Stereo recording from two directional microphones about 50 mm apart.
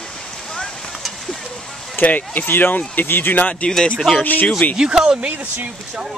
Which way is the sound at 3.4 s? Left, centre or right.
Left.